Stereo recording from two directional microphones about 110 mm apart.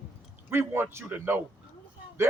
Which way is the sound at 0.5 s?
20° right (ahead or behind).